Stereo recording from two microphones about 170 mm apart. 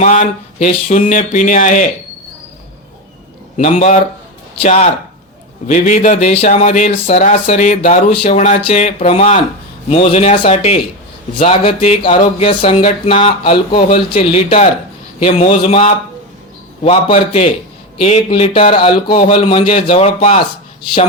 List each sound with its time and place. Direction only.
0.0 s speech: 45° left (ahead or behind)
3.6 s speech: 40° left (ahead or behind)
8.3 s a sound: 40° left (ahead or behind)